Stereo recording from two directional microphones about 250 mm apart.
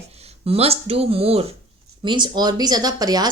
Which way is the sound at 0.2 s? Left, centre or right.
Right.